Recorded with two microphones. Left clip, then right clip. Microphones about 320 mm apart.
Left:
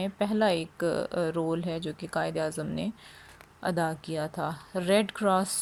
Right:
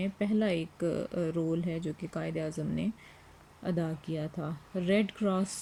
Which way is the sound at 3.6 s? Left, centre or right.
Centre.